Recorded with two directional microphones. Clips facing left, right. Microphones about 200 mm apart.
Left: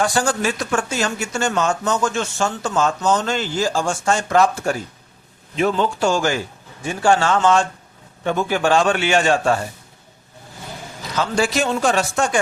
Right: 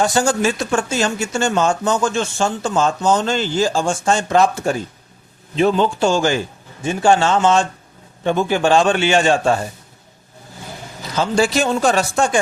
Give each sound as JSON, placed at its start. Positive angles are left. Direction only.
{"t": 0.0, "sound": "speech", "side_deg": -25}
{"t": 11.2, "sound": "speech", "side_deg": -30}